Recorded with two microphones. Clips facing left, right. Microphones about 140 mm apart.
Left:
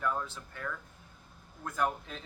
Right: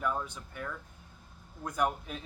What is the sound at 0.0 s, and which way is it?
Speech, 15° right (ahead or behind).